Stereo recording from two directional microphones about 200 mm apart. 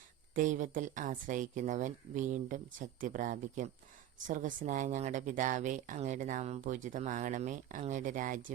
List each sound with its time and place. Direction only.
0.3 s speech: 40° right (ahead or behind)